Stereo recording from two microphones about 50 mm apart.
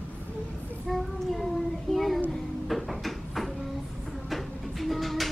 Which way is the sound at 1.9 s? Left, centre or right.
Centre.